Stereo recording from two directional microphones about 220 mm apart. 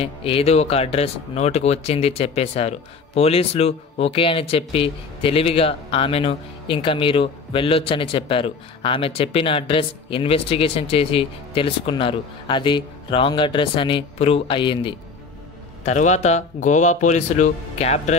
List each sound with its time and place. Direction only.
0.0 s speech: 25° left (ahead or behind)
15.8 s speech: 35° left (ahead or behind)